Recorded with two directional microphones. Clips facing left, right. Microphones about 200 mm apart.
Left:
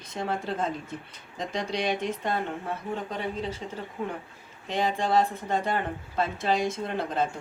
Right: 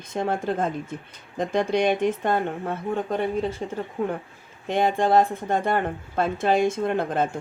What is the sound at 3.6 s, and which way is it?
Speech, 50° right (ahead or behind).